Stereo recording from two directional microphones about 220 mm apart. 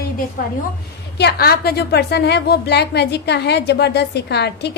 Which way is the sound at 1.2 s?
45° left (ahead or behind).